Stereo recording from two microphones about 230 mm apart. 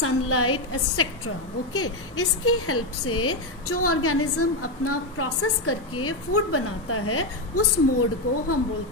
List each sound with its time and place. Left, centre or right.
0.0 s a woman's voice: left